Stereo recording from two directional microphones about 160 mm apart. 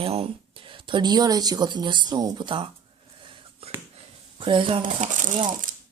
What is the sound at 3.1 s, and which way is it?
Wheeze, 35° right (ahead or behind).